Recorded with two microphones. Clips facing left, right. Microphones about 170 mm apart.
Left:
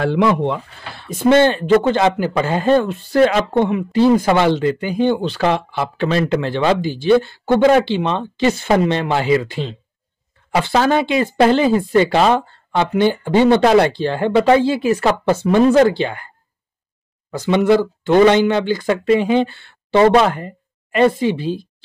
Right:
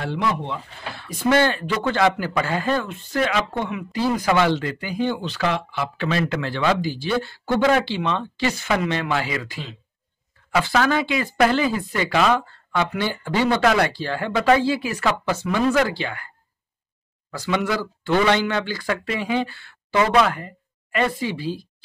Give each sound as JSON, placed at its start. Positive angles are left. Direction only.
{"t": 0.0, "sound": "speech", "side_deg": 90}
{"t": 0.9, "sound": "speech", "side_deg": 25}
{"t": 17.3, "sound": "speech", "side_deg": 25}